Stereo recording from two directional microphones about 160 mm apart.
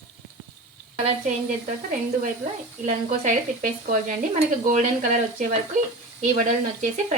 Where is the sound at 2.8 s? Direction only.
50° right (ahead or behind).